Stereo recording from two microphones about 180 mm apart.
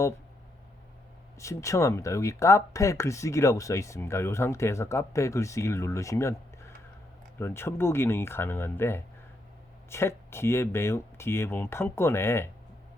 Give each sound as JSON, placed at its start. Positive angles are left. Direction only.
{"t": 1.4, "sound": "speech", "side_deg": 15}